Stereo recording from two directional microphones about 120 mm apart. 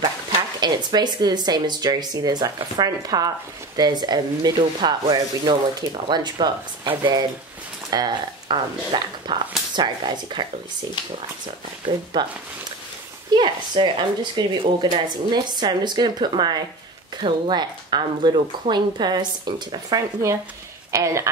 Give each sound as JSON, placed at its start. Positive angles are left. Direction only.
{"t": 0.6, "sound": "rub", "side_deg": -35}
{"t": 12.1, "sound": "rub", "side_deg": -40}
{"t": 20.9, "sound": "a woman's voice", "side_deg": -25}